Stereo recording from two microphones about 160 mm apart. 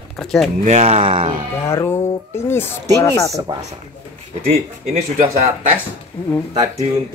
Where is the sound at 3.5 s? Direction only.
25° right (ahead or behind).